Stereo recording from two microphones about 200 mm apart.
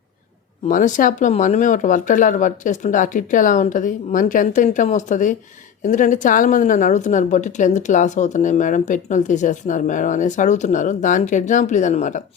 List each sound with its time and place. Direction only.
0.7 s a woman's voice: 40° left (ahead or behind)